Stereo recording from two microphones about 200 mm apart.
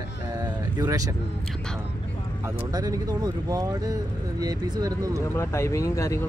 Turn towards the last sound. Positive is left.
turn(degrees=15)  # may be behind; listen again after turning